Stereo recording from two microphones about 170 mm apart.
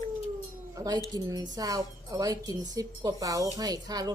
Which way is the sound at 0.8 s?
25° right (ahead or behind).